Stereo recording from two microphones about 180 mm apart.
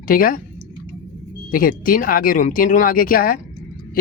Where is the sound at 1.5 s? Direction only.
50° left (ahead or behind).